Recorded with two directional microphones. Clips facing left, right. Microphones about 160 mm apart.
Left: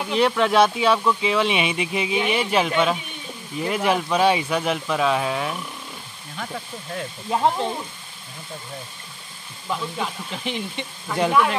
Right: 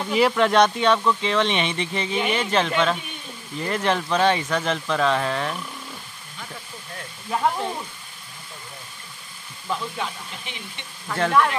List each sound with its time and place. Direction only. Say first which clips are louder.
0.1 s speech: even; centre (ahead or behind)
7.2 s speech: left 2 dB; 25° left (ahead or behind)
10.3 s speech: left 10 dB; 90° left
11.1 s speech: left 1 dB; 10° left (ahead or behind)